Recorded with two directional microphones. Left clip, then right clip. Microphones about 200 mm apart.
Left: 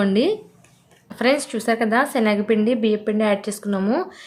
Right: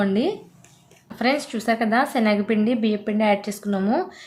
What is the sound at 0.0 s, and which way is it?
A woman's voice, 25° left (ahead or behind).